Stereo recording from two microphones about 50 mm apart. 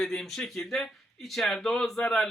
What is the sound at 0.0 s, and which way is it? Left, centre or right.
Speech, centre.